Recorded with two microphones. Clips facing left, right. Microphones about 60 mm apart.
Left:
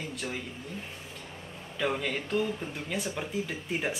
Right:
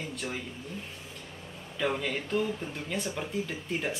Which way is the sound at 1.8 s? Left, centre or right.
Centre.